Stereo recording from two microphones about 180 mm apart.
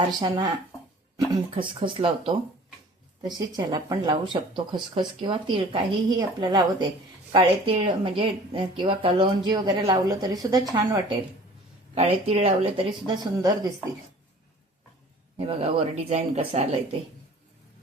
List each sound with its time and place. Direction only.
0.2 s a woman's voice: 25° right (ahead or behind)
11.9 s speech: 30° right (ahead or behind)
15.4 s speech: 35° right (ahead or behind)